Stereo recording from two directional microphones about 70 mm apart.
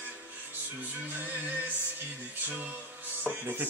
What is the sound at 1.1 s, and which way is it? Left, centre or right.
Speech, right.